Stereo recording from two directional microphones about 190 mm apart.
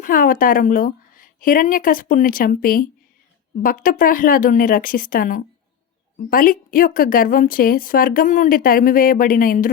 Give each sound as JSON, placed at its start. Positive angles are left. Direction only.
{"t": 0.0, "sound": "a woman's voice", "side_deg": 45}